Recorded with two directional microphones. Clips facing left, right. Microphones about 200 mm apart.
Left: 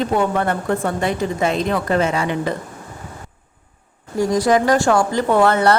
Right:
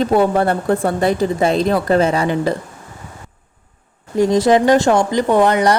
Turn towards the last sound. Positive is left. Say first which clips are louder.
# right 1 dB
turn(degrees=-15)  # may be behind; listen again after turning